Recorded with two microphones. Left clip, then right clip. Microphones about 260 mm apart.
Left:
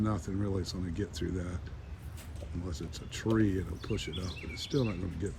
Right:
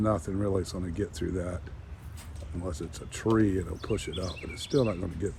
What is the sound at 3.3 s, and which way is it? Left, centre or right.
Speech, centre.